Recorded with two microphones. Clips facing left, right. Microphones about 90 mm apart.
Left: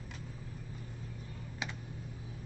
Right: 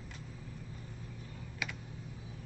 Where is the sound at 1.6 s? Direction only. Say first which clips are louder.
Even; 25° left (ahead or behind).